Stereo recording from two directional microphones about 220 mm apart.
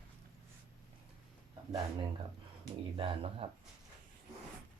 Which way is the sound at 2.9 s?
25° right (ahead or behind).